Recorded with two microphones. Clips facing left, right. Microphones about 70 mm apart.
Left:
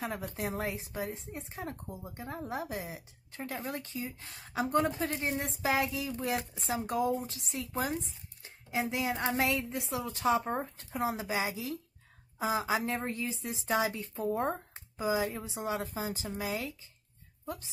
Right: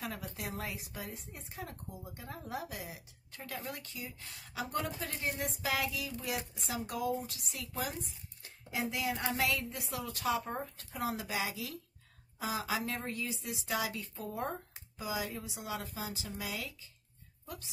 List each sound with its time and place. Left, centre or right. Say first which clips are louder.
0.4 s a woman's voice: left 8 dB; left